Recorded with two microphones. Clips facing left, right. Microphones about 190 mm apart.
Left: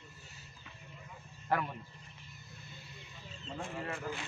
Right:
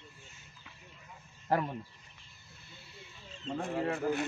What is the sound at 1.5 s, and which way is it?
Speech, 35° right (ahead or behind).